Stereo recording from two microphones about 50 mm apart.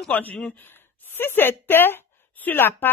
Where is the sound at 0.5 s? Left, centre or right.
Left.